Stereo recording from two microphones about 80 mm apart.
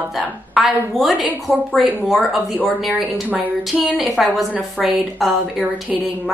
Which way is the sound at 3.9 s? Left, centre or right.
Centre.